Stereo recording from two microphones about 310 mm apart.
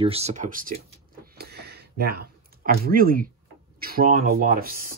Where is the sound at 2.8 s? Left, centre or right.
Right.